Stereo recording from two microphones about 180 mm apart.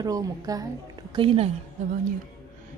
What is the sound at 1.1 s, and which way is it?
Speech, 30° right (ahead or behind).